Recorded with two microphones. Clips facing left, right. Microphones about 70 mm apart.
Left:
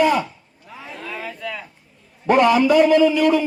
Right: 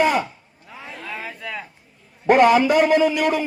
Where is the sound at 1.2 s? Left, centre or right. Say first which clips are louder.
Left 2 dB; centre.